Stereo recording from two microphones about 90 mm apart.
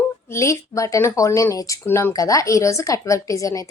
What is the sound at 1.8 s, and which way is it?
Speech, 25° left (ahead or behind).